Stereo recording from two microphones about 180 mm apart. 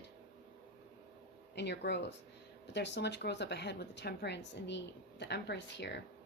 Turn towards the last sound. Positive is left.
turn(degrees=75)  # may be behind; listen again after turning